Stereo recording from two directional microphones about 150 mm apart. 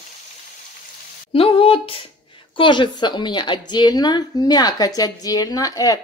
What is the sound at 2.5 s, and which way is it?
Speech, 35° left (ahead or behind).